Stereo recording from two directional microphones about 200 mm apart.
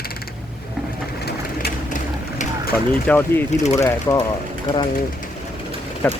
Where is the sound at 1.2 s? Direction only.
45° left (ahead or behind).